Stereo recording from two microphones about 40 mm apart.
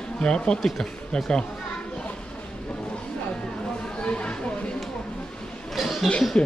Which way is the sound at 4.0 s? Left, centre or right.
Left.